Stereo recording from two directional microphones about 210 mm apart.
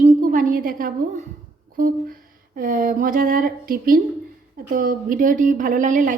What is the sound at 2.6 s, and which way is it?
A woman's voice, 40° right (ahead or behind).